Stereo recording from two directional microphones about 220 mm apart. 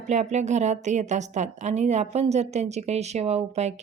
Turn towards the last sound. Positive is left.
turn(degrees=-30)  # may be behind; listen again after turning